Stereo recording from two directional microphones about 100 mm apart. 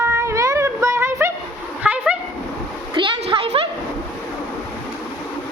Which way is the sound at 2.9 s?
55° right (ahead or behind).